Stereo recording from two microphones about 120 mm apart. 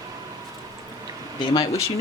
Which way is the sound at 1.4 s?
40° left (ahead or behind).